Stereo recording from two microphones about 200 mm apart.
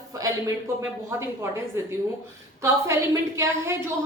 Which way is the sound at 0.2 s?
15° right (ahead or behind).